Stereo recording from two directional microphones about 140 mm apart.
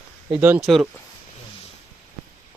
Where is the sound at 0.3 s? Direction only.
10° right (ahead or behind).